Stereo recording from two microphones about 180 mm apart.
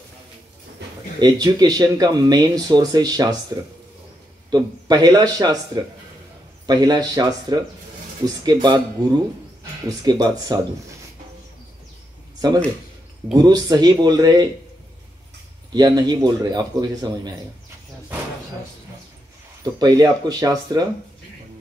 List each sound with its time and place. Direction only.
1.2 s speech: 20° right (ahead or behind)
4.5 s speech: 20° right (ahead or behind)
6.6 s speech: 25° right (ahead or behind)
13.3 s speech: 20° right (ahead or behind)
15.7 s speech: 20° right (ahead or behind)
19.6 s speech: 20° right (ahead or behind)